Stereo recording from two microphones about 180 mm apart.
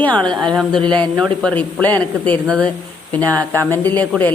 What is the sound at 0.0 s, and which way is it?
A man's voice, 5° left (ahead or behind).